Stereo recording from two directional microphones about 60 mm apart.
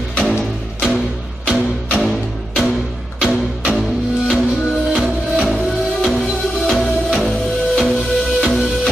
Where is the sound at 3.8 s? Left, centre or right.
Centre.